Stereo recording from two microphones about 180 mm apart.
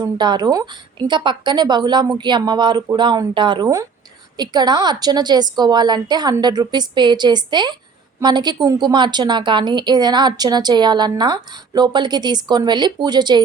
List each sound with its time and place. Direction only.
0.0 s a woman's voice: 25° right (ahead or behind)